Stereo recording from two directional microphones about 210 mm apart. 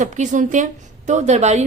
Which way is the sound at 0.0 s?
35° right (ahead or behind).